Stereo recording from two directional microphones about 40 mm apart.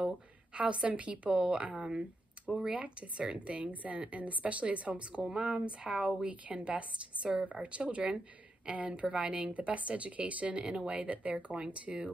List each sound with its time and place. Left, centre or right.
0.6 s a woman's voice: right
9.0 s a woman's voice: right